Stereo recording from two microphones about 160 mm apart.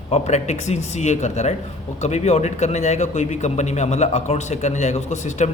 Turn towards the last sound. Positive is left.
turn(degrees=45)  # may be behind; listen again after turning